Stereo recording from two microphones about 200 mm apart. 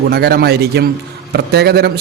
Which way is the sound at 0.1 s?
55° right (ahead or behind).